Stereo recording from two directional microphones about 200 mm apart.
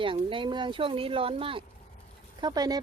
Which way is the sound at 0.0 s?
25° right (ahead or behind).